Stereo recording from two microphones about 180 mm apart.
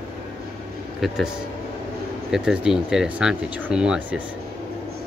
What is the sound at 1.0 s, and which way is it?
Speech, centre (ahead or behind).